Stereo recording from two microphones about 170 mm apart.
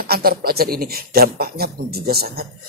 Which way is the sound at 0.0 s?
60° right (ahead or behind).